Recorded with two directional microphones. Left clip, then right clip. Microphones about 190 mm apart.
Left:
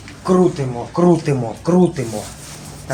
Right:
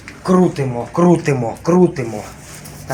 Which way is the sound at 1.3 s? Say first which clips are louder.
Right 2 dB; 25° right (ahead or behind).